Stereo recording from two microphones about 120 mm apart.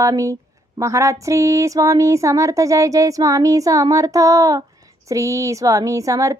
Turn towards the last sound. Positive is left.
turn(degrees=-25)  # may be behind; listen again after turning